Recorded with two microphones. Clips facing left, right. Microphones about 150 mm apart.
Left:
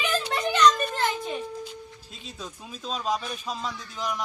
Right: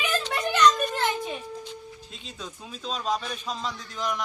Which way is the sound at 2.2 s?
5° left (ahead or behind).